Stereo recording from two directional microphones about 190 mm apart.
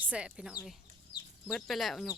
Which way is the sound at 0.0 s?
5° right (ahead or behind).